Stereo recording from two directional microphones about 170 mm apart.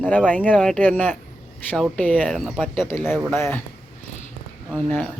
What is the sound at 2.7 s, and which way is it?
Speech, 15° left (ahead or behind).